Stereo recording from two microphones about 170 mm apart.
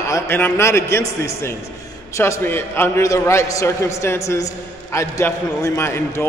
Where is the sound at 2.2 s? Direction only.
15° left (ahead or behind).